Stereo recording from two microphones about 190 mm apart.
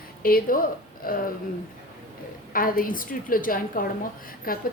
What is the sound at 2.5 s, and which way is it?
A woman's voice, 50° left (ahead or behind).